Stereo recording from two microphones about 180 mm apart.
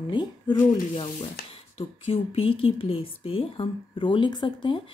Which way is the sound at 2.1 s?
30° left (ahead or behind).